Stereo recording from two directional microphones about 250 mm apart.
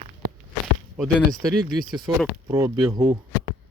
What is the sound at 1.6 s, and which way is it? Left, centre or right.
Speech, right.